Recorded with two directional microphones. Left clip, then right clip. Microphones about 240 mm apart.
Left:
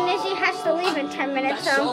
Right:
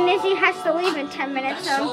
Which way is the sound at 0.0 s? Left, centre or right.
Right.